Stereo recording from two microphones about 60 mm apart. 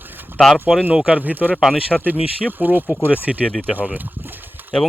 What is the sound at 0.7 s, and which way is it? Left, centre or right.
Speech, centre.